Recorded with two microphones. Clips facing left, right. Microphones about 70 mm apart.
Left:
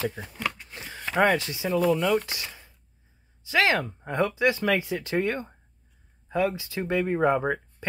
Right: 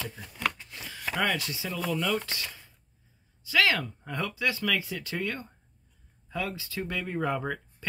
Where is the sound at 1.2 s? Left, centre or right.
Left.